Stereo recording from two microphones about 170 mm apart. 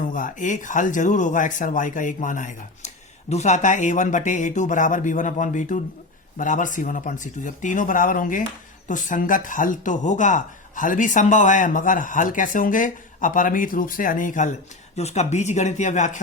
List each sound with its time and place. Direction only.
0.0 s speech: 50° left (ahead or behind)